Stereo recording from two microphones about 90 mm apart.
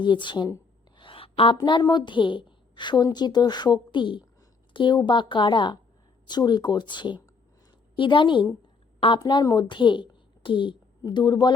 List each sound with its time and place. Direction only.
0.0 s speech: 60° left (ahead or behind)
0.9 s a sound: 80° left
1.8 s a woman's voice: 55° left (ahead or behind)
9.1 s a woman's voice: 50° left (ahead or behind)
9.6 s a woman's voice: 60° left (ahead or behind)
11.1 s speech: 55° left (ahead or behind)